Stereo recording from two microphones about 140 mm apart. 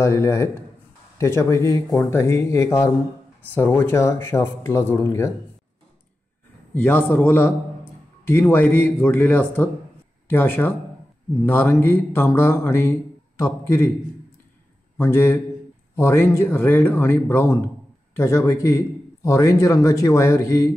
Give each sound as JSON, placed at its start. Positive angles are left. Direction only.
{"t": 0.0, "sound": "a man's voice", "side_deg": 20}
{"t": 6.7, "sound": "a man's voice", "side_deg": 15}
{"t": 15.0, "sound": "a man's voice", "side_deg": 20}